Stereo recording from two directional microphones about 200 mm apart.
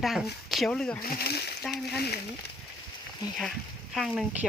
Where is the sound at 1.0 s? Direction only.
50° left (ahead or behind).